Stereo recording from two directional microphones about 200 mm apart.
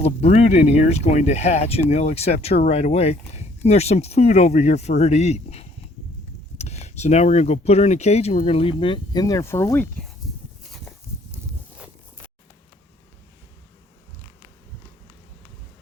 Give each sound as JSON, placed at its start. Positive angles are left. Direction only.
{"t": 0.0, "sound": "speech", "side_deg": 30}